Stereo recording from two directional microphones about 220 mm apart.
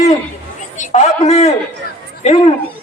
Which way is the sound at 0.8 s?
30° left (ahead or behind).